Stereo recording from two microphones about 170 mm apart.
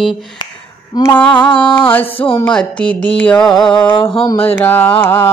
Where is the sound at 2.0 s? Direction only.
35° left (ahead or behind).